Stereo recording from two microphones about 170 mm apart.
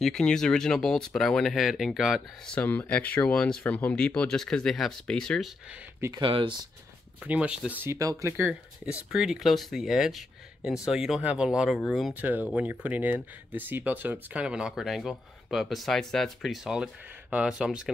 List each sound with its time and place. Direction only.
0.0 s speech: 5° left (ahead or behind)
5.9 s speech: 15° right (ahead or behind)
6.2 s speech: 30° right (ahead or behind)
7.2 s speech: 5° right (ahead or behind)
12.2 s speech: 10° right (ahead or behind)